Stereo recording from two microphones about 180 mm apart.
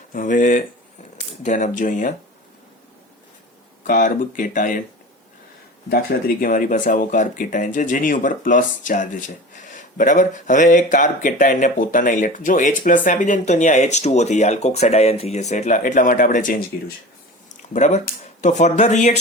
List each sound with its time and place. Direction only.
0.1 s speech: 45° left (ahead or behind)
3.8 s speech: 45° left (ahead or behind)
5.9 s speech: 55° left (ahead or behind)
17.7 s speech: 40° left (ahead or behind)